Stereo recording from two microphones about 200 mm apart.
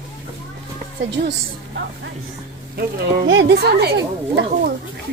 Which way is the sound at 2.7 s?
60° right (ahead or behind).